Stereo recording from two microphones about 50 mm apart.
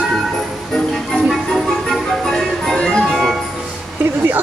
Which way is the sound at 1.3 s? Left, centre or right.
Centre.